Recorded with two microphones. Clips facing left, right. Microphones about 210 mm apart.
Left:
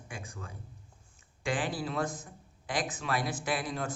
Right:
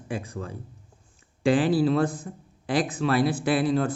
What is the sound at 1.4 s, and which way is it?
A man's voice, 35° right (ahead or behind).